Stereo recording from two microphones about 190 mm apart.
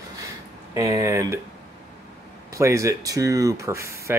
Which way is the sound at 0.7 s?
15° right (ahead or behind).